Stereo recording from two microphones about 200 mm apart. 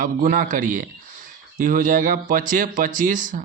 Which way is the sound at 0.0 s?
45° right (ahead or behind).